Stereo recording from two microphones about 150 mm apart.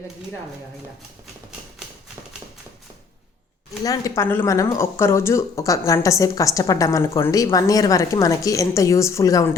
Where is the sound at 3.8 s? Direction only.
25° left (ahead or behind).